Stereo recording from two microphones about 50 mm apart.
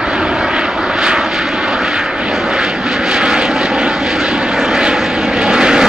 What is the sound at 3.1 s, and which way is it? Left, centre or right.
Vehicle, centre.